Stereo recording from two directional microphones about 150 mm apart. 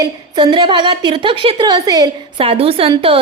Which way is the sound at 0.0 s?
30° right (ahead or behind).